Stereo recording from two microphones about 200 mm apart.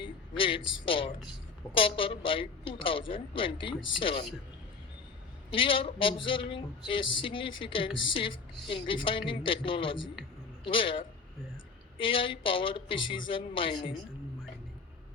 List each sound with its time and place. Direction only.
0.0 s speech: 25° left (ahead or behind)
5.5 s a man's voice: 25° left (ahead or behind)